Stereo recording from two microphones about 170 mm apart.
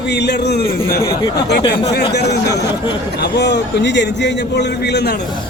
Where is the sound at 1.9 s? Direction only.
75° left (ahead or behind).